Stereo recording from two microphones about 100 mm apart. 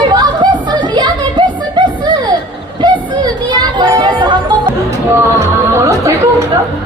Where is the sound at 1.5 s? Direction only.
50° right (ahead or behind).